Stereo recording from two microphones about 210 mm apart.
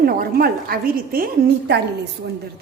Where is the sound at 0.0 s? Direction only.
45° right (ahead or behind).